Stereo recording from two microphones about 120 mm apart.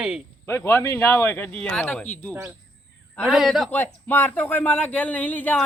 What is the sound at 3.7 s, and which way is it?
Speech, 15° left (ahead or behind).